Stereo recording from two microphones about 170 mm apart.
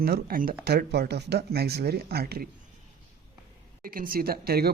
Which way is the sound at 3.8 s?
55° right (ahead or behind).